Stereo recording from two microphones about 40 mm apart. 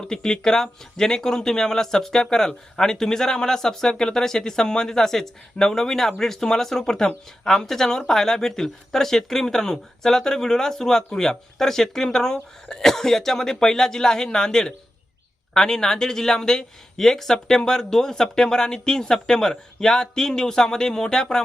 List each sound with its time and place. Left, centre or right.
0.0 s speech: centre